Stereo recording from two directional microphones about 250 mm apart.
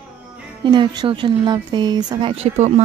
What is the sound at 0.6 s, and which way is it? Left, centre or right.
Speech, centre.